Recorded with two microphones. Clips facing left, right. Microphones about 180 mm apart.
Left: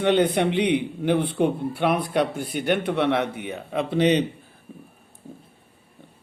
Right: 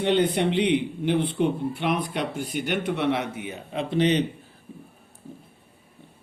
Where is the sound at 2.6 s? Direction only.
60° left (ahead or behind).